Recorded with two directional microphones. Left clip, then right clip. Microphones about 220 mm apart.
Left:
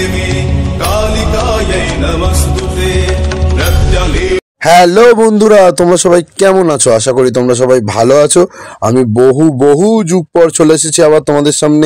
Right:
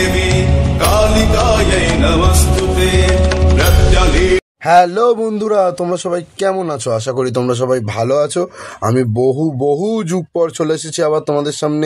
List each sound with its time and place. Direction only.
0.8 s music: centre (ahead or behind)
4.6 s a man's voice: 40° left (ahead or behind)